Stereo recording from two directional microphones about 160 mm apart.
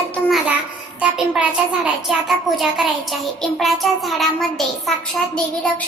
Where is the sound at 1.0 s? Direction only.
5° right (ahead or behind).